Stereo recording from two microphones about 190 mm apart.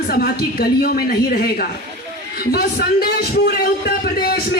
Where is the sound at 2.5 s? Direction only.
55° left (ahead or behind).